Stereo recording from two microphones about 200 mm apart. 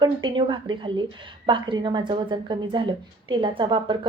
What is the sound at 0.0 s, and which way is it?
A woman's voice, 25° right (ahead or behind).